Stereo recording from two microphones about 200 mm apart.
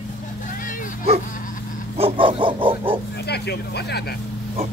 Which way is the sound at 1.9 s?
25° right (ahead or behind).